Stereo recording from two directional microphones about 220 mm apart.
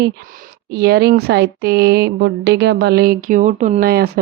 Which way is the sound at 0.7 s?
50° right (ahead or behind).